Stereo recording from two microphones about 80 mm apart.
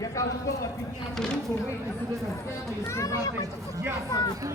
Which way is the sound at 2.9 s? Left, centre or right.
Left.